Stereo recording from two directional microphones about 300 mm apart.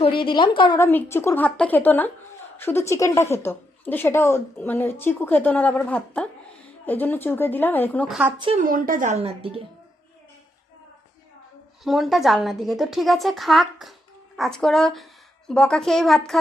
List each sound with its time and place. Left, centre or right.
0.0 s a woman's voice: centre
8.2 s a woman's voice: centre
11.8 s a woman's voice: centre